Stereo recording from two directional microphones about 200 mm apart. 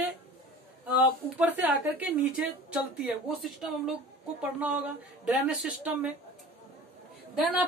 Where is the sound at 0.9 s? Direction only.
10° right (ahead or behind).